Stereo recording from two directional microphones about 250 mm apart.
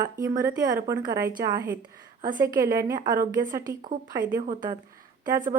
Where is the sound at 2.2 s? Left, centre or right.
Right.